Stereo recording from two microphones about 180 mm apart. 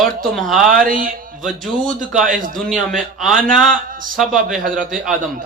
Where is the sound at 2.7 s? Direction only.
Centre (ahead or behind).